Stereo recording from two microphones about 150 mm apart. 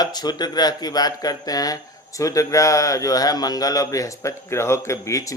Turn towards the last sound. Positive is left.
turn(degrees=20)  # may be behind; listen again after turning